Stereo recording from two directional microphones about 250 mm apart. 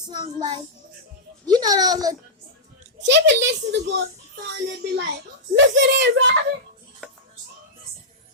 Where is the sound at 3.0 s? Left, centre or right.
Right.